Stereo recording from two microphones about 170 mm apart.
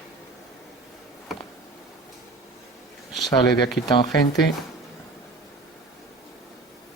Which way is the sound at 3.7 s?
Centre (ahead or behind).